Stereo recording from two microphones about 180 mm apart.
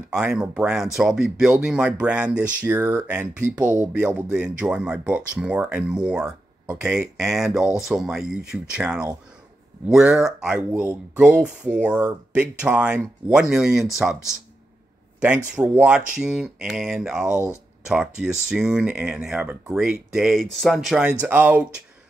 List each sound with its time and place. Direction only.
0.1 s speech: 5° right (ahead or behind)
2.8 s speech: 20° right (ahead or behind)
3.1 s speech: 5° right (ahead or behind)
10.7 s speech: 15° right (ahead or behind)
15.1 s speech: 5° right (ahead or behind)